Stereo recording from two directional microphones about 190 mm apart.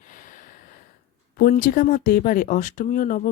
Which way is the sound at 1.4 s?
45° left (ahead or behind).